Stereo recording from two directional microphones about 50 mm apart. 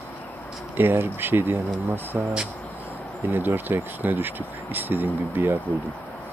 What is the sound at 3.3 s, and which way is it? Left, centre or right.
Speech, right.